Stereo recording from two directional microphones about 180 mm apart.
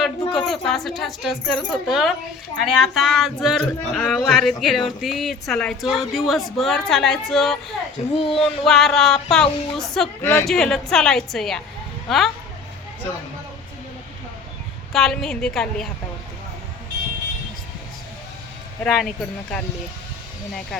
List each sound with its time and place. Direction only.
0.3 s speech: centre (ahead or behind)
8.1 s speech: 30° left (ahead or behind)
8.4 s speech: centre (ahead or behind)
14.9 s speech: centre (ahead or behind)
18.8 s speech: centre (ahead or behind)